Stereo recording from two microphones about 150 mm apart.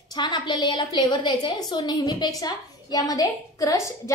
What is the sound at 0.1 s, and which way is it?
A woman's voice, 30° left (ahead or behind).